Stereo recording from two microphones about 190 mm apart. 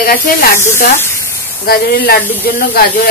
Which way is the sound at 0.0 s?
50° left (ahead or behind).